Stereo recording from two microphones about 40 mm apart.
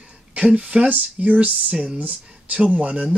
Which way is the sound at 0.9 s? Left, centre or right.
Right.